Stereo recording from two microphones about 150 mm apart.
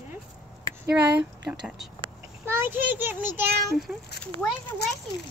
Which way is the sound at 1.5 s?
5° right (ahead or behind).